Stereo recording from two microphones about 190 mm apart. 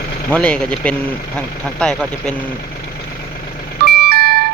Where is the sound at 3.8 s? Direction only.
55° right (ahead or behind).